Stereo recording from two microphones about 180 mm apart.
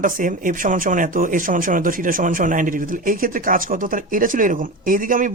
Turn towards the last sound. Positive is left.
turn(degrees=-50)  # may be behind; listen again after turning